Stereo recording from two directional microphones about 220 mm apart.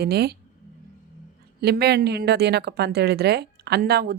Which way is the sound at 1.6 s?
45° right (ahead or behind).